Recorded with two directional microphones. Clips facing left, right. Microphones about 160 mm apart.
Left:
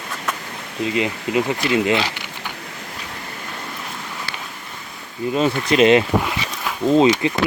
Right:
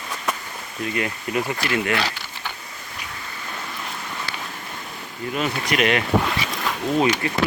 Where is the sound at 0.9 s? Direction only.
20° left (ahead or behind).